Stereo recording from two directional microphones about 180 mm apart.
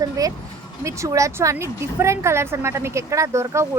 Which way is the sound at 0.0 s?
20° right (ahead or behind).